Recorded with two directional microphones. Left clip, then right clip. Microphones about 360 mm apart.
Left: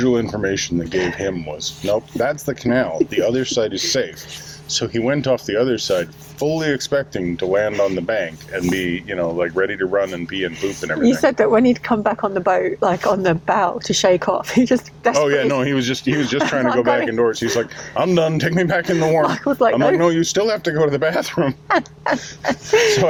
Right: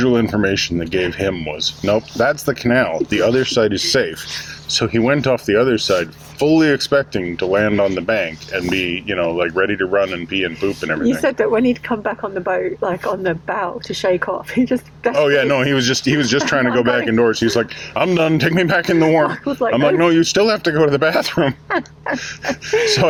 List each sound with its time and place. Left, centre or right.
0.0 s speech: right
11.0 s speech: centre
15.2 s speech: right
19.3 s speech: left
19.7 s speech: right
21.7 s speech: left